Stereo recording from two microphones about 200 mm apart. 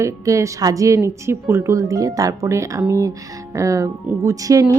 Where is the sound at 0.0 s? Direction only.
15° right (ahead or behind).